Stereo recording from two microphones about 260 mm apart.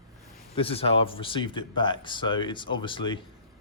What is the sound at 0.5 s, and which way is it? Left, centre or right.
Speech, left.